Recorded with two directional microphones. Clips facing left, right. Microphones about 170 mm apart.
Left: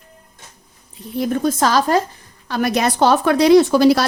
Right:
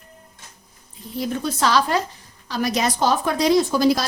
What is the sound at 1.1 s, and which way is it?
Speech, 55° left (ahead or behind).